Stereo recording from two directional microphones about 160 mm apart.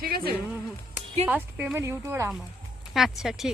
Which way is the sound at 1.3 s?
10° right (ahead or behind).